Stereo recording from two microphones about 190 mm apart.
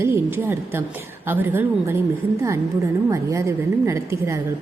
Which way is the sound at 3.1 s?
15° right (ahead or behind).